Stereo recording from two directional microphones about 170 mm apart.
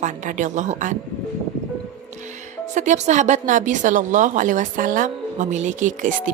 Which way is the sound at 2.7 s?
45° right (ahead or behind).